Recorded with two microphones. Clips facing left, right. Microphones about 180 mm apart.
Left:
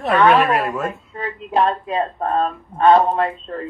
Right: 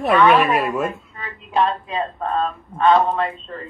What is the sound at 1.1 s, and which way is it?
Speech, 40° left (ahead or behind).